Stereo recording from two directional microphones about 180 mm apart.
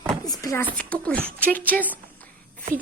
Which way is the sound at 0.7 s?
5° left (ahead or behind).